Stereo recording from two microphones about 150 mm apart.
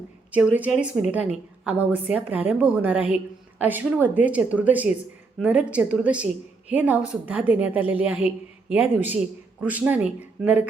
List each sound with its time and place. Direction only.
0.5 s a woman's voice: 10° right (ahead or behind)